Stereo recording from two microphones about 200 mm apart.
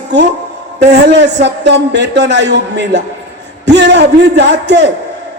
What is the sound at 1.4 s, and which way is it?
A man's voice, 60° right (ahead or behind).